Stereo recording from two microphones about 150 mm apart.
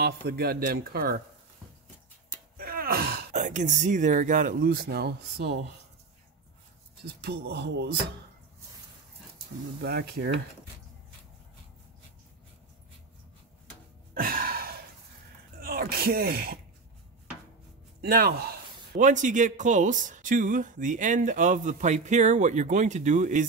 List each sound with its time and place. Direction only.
0.0 s a man's voice: 90° right
2.5 s a sound: 75° right (ahead or behind)
3.3 s speech: 55° right (ahead or behind); by 5.6 s 90° right
7.2 s a man's voice: 90° right
9.8 s a man's voice: 90° right
14.1 s gasp: 80° right
15.6 s a sound: 85° right
18.0 s a man's voice: 90° right
18.9 s speech: 55° right (ahead or behind)